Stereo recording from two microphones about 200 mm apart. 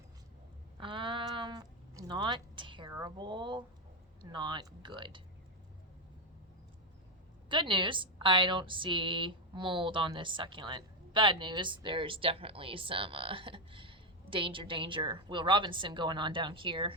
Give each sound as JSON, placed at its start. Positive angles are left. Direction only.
{"t": 0.8, "sound": "a sound", "side_deg": -25}
{"t": 4.3, "sound": "a woman's voice", "side_deg": -25}
{"t": 7.5, "sound": "a woman's voice", "side_deg": -25}